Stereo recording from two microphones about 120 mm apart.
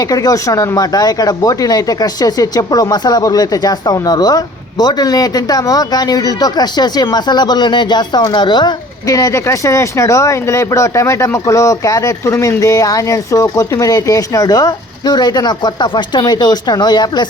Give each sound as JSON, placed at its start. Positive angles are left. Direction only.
{"t": 0.0, "sound": "speech", "side_deg": 30}